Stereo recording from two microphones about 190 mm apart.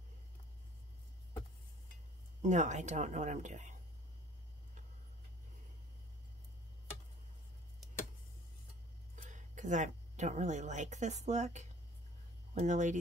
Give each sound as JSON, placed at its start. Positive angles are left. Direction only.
{"t": 2.4, "sound": "speech", "side_deg": -40}
{"t": 9.1, "sound": "speech", "side_deg": -40}